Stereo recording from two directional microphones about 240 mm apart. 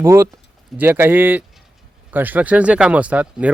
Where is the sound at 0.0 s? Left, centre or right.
Centre.